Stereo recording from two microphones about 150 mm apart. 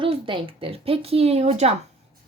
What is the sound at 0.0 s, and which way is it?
A woman's voice, 35° right (ahead or behind).